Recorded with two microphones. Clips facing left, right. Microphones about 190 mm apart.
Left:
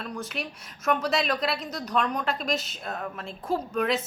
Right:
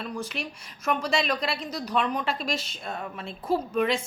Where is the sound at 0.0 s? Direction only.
Centre (ahead or behind).